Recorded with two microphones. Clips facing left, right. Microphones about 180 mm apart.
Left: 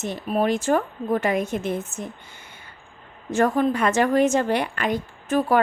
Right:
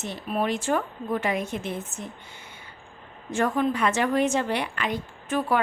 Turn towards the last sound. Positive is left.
turn(degrees=40)  # may be behind; listen again after turning